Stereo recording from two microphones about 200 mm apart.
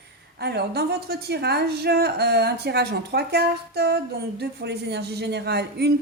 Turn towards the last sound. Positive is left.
turn(degrees=-55)  # may be behind; listen again after turning